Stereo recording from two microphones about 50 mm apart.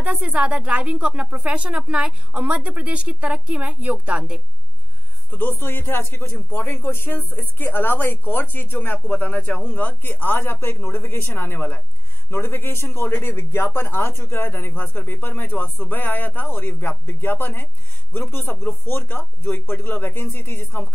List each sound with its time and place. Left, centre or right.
0.1 s a woman's voice: right
5.3 s speech: left